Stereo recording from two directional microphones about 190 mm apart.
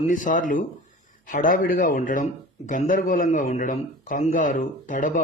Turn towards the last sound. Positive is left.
turn(degrees=45)  # may be behind; listen again after turning